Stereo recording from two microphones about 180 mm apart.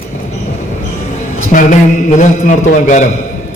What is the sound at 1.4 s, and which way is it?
A man's voice, 45° left (ahead or behind).